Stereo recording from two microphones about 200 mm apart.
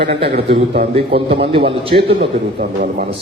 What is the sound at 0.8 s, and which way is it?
A man's voice, 30° right (ahead or behind).